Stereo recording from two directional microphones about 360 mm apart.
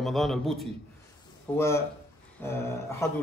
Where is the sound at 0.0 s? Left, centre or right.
Centre.